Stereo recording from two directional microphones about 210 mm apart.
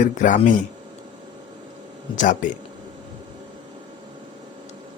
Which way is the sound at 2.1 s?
35° left (ahead or behind).